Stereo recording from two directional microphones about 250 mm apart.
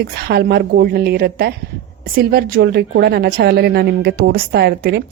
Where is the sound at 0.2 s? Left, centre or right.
Right.